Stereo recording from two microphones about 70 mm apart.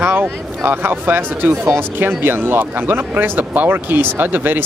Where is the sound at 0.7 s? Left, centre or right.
Right.